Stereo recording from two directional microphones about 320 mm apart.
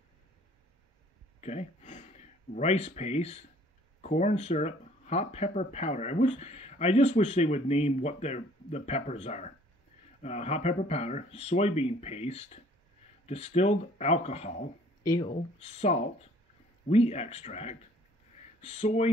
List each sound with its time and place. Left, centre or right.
1.4 s speech: centre